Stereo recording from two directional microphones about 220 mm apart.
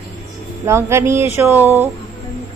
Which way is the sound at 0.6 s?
10° right (ahead or behind).